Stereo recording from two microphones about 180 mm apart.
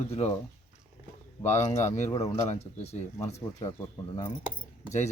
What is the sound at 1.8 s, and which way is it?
Speech, 40° left (ahead or behind).